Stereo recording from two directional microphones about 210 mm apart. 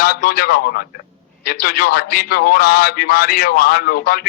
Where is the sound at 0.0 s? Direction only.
45° left (ahead or behind).